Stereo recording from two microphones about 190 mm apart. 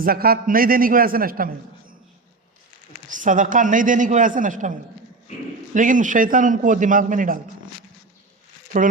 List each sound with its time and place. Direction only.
0.0 s a man's voice: 50° right (ahead or behind)
3.1 s a man's voice: 45° right (ahead or behind)
5.7 s a man's voice: 45° right (ahead or behind)